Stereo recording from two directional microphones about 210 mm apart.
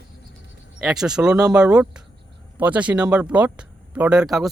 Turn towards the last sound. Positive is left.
turn(degrees=0)  # may be behind; listen again after turning